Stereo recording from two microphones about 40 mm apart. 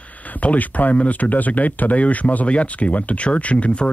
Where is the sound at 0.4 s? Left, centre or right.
Left.